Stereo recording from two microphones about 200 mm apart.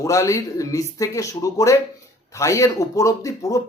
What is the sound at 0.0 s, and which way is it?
Speech, 15° left (ahead or behind).